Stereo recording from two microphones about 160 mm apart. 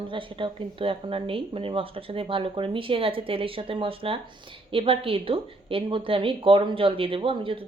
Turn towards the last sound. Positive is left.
turn(degrees=-35)  # may be behind; listen again after turning